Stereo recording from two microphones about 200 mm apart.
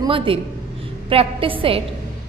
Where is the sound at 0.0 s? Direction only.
25° right (ahead or behind).